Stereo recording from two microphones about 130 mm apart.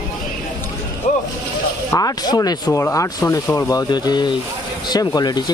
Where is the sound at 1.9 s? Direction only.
25° left (ahead or behind).